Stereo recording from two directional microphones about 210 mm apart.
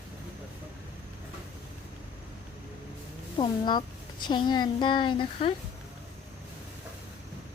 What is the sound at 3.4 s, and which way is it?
A woman's voice, 20° left (ahead or behind).